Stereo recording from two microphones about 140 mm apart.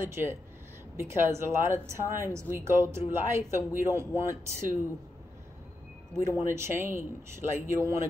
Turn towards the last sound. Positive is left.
turn(degrees=-20)  # may be behind; listen again after turning